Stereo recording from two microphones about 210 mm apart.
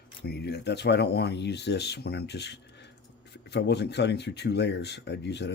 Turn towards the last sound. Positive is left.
turn(degrees=55)  # may be behind; listen again after turning